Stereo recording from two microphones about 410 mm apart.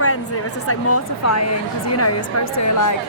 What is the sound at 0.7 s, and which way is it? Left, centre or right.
A woman's voice, left.